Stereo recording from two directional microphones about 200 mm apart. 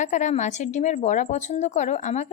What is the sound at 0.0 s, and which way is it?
A woman's voice, 35° left (ahead or behind).